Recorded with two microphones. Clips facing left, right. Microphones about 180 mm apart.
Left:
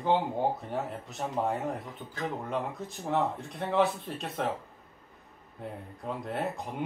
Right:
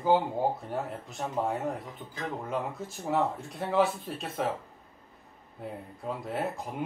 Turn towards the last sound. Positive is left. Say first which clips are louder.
# right 1 dB
turn(degrees=0)  # may be behind; listen again after turning